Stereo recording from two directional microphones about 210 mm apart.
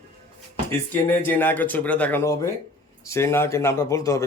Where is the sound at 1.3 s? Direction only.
10° left (ahead or behind).